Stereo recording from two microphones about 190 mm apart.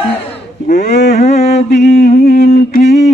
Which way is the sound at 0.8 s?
60° left (ahead or behind).